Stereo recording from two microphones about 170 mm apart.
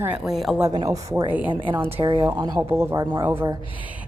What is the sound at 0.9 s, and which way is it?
A woman's voice, 20° right (ahead or behind).